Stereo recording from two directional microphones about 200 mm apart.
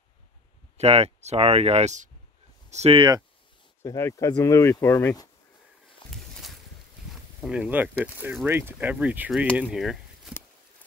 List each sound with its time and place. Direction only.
0.7 s speech: 30° right (ahead or behind)
3.8 s speech: 15° left (ahead or behind)
6.0 s a sound: centre (ahead or behind)
7.4 s speech: 5° right (ahead or behind)